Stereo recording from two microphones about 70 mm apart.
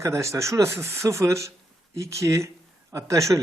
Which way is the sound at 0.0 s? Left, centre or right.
Right.